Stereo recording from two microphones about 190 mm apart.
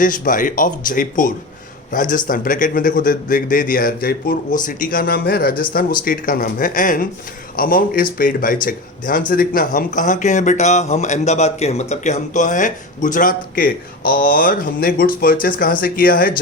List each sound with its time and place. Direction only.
0.0 s speech: 45° left (ahead or behind)